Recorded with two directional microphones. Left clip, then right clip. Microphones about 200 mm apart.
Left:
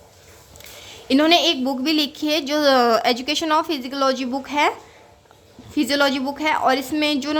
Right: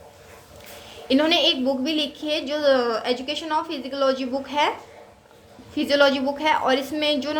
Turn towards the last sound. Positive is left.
turn(degrees=20)  # may be behind; listen again after turning